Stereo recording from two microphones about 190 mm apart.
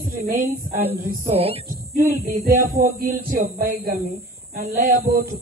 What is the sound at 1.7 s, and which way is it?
Hum, 50° right (ahead or behind).